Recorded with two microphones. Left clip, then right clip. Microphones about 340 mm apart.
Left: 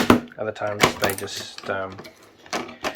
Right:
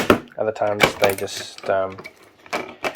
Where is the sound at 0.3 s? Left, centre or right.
Centre.